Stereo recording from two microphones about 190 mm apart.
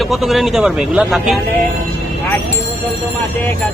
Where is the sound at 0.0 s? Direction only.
Centre (ahead or behind).